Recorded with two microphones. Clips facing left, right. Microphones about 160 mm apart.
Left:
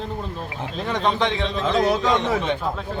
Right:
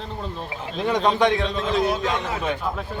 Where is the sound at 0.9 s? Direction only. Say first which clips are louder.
Right 3 dB; 10° right (ahead or behind).